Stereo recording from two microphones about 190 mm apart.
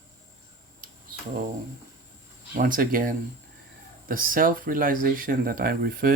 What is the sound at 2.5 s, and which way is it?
Speech, 45° right (ahead or behind).